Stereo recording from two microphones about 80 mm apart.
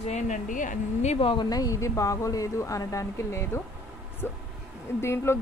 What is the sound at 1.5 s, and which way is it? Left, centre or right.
A woman's voice, left.